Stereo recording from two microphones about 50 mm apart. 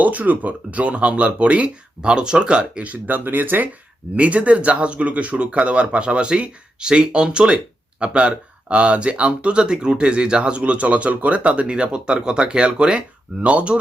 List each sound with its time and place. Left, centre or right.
0.0 s speech: right
4.2 s speech: right